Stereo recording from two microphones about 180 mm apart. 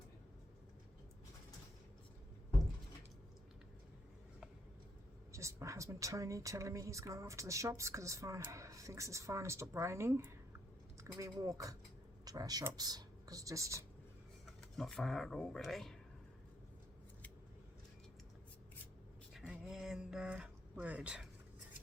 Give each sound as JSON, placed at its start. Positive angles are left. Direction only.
{"t": 5.3, "sound": "a woman's voice", "side_deg": -15}
{"t": 14.8, "sound": "speech", "side_deg": 0}
{"t": 19.3, "sound": "a sound", "side_deg": 0}